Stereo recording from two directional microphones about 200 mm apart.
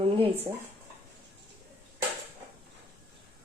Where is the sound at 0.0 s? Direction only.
25° right (ahead or behind).